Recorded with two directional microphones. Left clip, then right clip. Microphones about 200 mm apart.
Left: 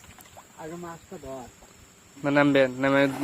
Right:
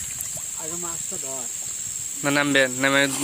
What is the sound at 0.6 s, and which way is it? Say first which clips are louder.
Speech: right 3 dB; 5° right (ahead or behind).